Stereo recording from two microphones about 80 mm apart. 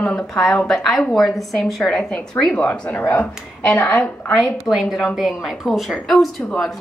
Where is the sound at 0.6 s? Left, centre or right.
Centre.